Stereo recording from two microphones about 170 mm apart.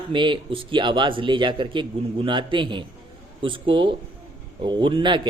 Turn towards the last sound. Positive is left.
turn(degrees=-30)  # may be behind; listen again after turning